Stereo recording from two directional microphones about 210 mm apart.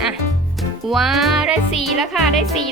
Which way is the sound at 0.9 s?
Centre (ahead or behind).